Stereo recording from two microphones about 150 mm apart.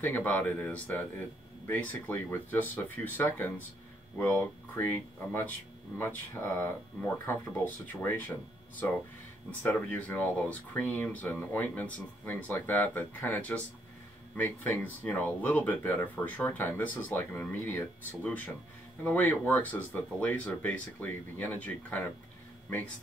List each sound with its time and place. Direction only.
0.0 s speech: 10° left (ahead or behind)
5.9 s speech: 15° left (ahead or behind)
9.5 s speech: 10° left (ahead or behind)